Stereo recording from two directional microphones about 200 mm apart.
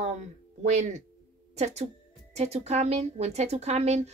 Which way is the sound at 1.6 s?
35° right (ahead or behind).